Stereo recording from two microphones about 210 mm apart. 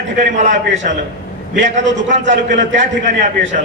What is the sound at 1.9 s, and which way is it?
A man's voice, 35° right (ahead or behind).